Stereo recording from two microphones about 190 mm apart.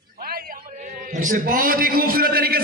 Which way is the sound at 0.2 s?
50° right (ahead or behind).